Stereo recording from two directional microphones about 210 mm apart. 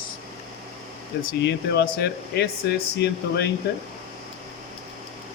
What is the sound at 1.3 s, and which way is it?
Speech, 50° left (ahead or behind).